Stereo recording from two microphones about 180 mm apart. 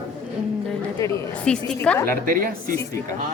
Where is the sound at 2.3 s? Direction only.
55° right (ahead or behind).